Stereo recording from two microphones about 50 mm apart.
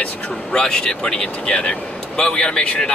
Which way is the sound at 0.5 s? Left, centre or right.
Centre.